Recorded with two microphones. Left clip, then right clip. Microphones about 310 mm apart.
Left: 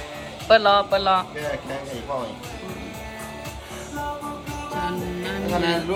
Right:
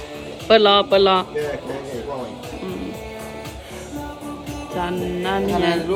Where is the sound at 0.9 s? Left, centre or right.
Right.